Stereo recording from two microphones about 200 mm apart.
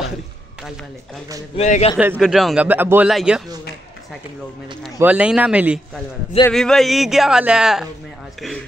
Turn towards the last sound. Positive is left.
turn(degrees=-5)  # may be behind; listen again after turning